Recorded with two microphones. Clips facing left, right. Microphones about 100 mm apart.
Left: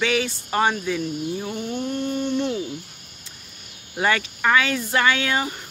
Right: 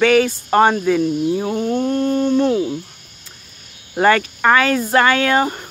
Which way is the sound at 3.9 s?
50° right (ahead or behind).